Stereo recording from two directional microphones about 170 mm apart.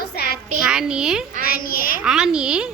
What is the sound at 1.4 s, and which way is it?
Speech, 60° left (ahead or behind).